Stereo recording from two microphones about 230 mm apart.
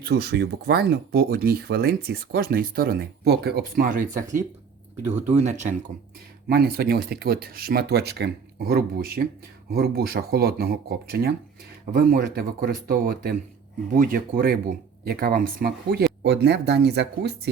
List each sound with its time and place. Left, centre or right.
0.0 s speech: right
6.5 s speech: right